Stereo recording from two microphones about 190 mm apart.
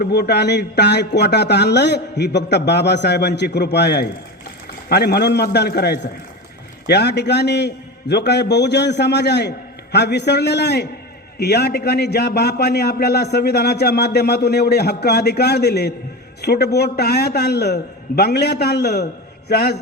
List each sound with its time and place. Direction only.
0.0 s a man's voice: 55° left (ahead or behind)